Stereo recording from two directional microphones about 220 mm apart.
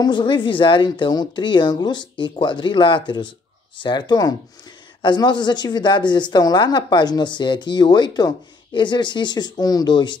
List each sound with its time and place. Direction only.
0.0 s speech: 20° left (ahead or behind)